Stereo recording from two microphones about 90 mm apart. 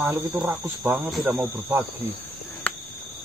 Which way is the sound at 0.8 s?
15° right (ahead or behind).